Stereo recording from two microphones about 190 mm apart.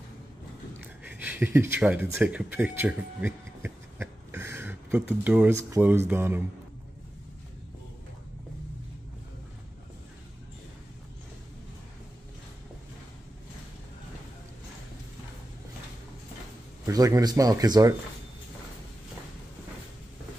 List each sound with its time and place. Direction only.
1.1 s speech: 10° right (ahead or behind)
16.8 s speech: 20° right (ahead or behind)